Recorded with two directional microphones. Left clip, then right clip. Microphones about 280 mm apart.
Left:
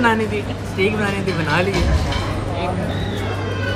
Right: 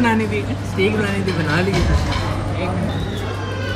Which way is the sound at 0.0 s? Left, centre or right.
Centre.